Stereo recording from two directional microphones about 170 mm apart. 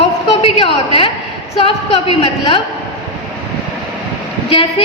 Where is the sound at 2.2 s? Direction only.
30° left (ahead or behind).